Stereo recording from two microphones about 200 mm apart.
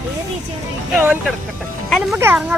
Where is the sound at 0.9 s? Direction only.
10° right (ahead or behind).